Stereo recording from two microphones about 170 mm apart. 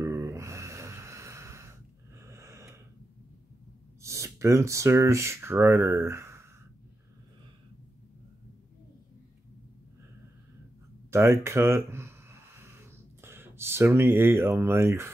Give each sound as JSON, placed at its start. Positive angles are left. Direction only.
{"t": 0.0, "sound": "snort", "side_deg": -15}
{"t": 4.0, "sound": "speech", "side_deg": -15}
{"t": 11.1, "sound": "a sound", "side_deg": -15}